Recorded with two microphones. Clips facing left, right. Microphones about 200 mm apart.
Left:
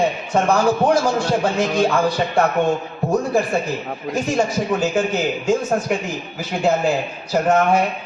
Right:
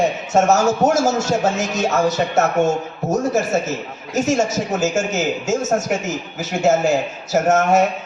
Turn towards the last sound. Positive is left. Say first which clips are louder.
# right 1 dB
turn(degrees=-45)  # may be behind; listen again after turning